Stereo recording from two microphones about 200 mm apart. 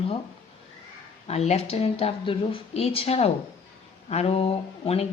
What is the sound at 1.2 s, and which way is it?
A woman's voice, 35° left (ahead or behind).